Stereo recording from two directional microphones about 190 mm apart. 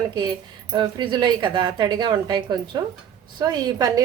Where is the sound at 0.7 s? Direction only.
25° right (ahead or behind).